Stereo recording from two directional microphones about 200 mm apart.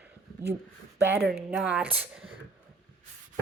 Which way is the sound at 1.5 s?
5° right (ahead or behind).